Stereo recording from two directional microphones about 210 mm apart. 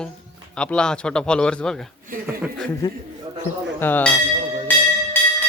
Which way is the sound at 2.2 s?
5° right (ahead or behind).